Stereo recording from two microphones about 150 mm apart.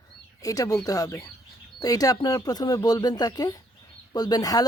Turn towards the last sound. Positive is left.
turn(degrees=25)  # may be behind; listen again after turning